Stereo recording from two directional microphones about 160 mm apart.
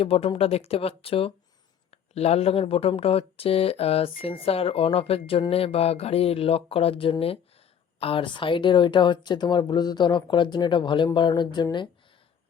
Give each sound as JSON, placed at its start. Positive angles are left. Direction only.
{"t": 0.0, "sound": "speech", "side_deg": 35}